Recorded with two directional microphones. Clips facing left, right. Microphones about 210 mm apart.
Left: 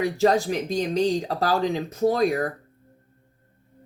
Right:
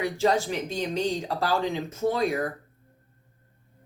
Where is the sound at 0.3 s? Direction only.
35° left (ahead or behind).